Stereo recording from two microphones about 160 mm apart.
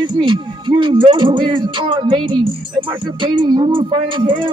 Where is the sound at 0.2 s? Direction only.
30° right (ahead or behind).